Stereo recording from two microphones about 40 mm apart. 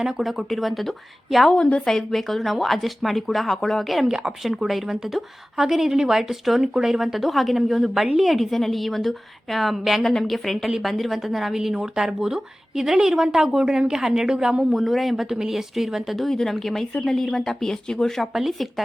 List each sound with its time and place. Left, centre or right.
0.2 s a woman's voice: centre
4.0 s speech: right
4.4 s a woman's voice: centre
10.0 s a woman's voice: centre
16.1 s a woman's voice: centre
18.3 s a woman's voice: centre